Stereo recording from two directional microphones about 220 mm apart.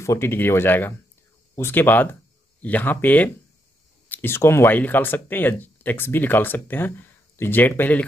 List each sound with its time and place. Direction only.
0.0 s speech: 10° left (ahead or behind)